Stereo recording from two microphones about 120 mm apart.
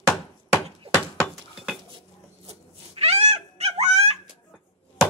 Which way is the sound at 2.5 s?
60° right (ahead or behind).